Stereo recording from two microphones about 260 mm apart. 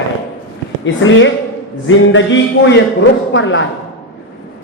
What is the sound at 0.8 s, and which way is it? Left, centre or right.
A woman's voice, left.